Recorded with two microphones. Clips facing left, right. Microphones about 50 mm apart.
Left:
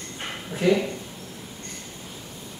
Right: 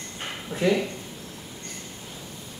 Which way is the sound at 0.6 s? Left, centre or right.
Centre.